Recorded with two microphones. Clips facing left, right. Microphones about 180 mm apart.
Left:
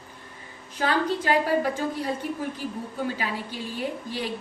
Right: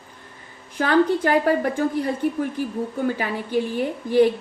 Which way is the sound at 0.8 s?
55° right (ahead or behind).